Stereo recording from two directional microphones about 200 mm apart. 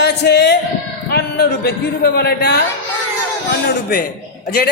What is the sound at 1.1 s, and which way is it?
A man's voice, 55° left (ahead or behind).